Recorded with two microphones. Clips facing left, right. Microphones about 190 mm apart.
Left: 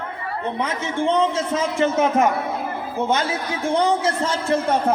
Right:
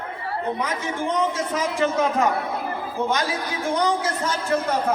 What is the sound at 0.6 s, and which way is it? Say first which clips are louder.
A man's voice: left 3 dB; 25° left (ahead or behind).